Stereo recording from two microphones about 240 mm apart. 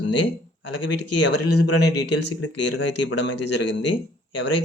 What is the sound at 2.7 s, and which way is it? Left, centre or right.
Speech, left.